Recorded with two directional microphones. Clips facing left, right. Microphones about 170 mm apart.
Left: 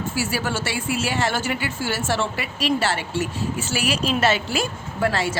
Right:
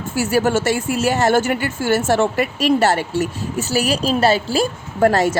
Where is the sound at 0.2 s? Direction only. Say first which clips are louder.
Right 10 dB; 45° right (ahead or behind).